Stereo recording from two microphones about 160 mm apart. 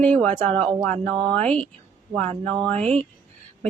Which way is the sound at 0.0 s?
10° left (ahead or behind).